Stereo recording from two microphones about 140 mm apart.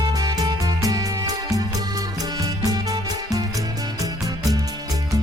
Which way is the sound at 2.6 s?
25° right (ahead or behind).